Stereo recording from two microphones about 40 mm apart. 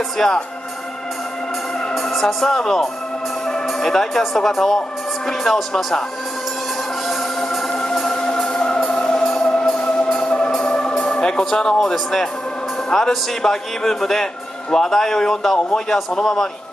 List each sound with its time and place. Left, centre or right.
0.2 s a man's voice: centre
2.0 s speech: centre
8.1 s music: centre
10.1 s music: centre
11.8 s a man's voice: centre